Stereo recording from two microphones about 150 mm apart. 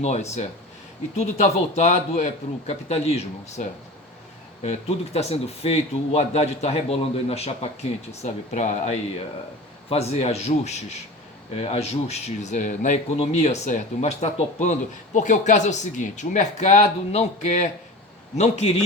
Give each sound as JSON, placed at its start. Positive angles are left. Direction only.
{"t": 0.0, "sound": "speech", "side_deg": 45}